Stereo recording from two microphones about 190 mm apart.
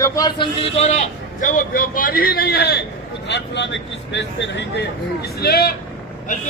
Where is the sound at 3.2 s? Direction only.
65° left (ahead or behind).